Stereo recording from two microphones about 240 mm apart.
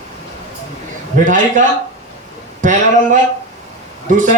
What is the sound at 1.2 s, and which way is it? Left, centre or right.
A man's voice, right.